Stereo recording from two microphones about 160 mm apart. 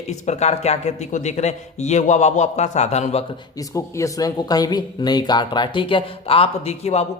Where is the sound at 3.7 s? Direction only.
20° left (ahead or behind).